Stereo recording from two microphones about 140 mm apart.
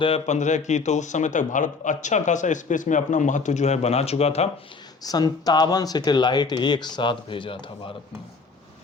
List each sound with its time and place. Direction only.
0.3 s a man's voice: 60° left (ahead or behind)
5.0 s speech: 30° left (ahead or behind)